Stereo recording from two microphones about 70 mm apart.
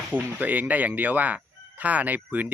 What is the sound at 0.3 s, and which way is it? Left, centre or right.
Speech, right.